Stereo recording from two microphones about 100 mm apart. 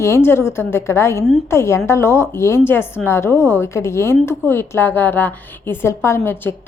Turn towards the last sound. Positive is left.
turn(degrees=25)  # may be behind; listen again after turning